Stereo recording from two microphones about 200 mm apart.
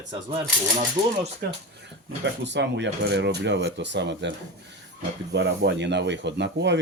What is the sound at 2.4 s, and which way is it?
Speech, 60° right (ahead or behind).